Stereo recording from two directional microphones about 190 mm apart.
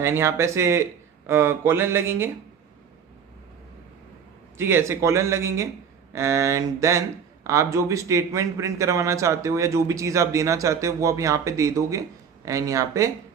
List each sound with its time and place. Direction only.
0.0 s speech: 15° right (ahead or behind)
4.5 s speech: 15° right (ahead or behind)